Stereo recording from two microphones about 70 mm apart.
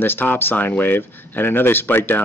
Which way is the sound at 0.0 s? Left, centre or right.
Left.